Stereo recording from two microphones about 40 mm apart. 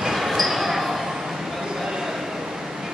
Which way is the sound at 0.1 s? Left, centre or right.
Centre.